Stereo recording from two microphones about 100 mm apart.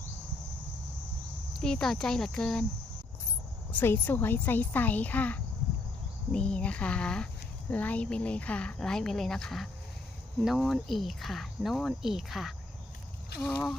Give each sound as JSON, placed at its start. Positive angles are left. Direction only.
{"t": 1.5, "sound": "speech", "side_deg": 5}
{"t": 3.7, "sound": "speech", "side_deg": 20}